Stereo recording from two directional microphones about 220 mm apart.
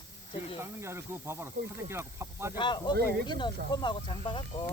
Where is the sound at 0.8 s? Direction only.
10° right (ahead or behind).